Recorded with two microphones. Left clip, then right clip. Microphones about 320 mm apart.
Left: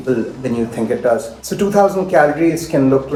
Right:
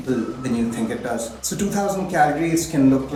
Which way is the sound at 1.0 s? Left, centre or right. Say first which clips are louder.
Left 10 dB; centre.